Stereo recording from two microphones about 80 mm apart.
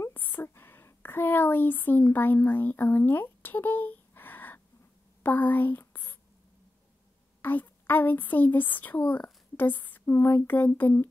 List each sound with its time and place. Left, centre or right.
0.1 s a woman's voice: left
5.2 s a sound: left
7.4 s a woman's voice: left